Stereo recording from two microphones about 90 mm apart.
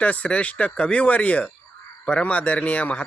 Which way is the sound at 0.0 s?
15° left (ahead or behind).